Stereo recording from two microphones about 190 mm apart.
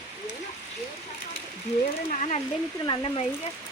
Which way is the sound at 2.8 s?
25° left (ahead or behind).